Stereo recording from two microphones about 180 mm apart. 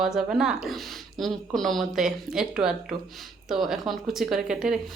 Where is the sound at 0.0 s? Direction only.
Centre (ahead or behind).